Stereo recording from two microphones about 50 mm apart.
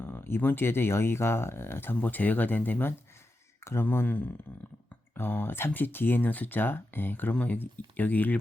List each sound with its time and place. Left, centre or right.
0.0 s speech: left
2.0 s speech: left
3.6 s a sound: left
5.1 s speech: left